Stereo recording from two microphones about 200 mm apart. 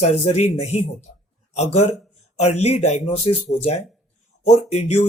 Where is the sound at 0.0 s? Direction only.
30° left (ahead or behind).